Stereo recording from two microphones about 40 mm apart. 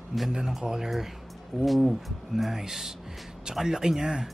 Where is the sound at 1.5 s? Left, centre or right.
Centre.